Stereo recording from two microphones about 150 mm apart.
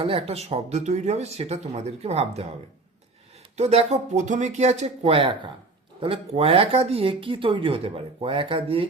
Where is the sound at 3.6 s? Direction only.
45° right (ahead or behind).